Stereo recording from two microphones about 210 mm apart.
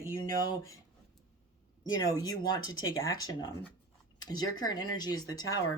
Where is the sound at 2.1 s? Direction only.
15° left (ahead or behind).